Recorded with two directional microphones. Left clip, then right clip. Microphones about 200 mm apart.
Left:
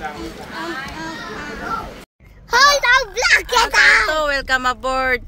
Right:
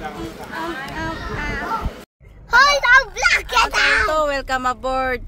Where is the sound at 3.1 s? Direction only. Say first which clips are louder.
Left 2 dB; 40° left (ahead or behind).